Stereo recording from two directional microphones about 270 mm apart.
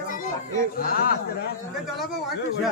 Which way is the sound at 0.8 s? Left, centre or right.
Left.